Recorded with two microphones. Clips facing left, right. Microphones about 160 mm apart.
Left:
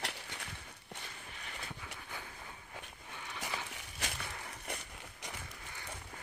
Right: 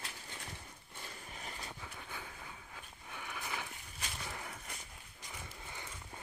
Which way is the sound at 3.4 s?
80° left.